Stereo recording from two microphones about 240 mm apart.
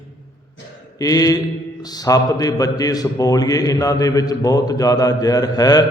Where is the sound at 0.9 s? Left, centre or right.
Centre.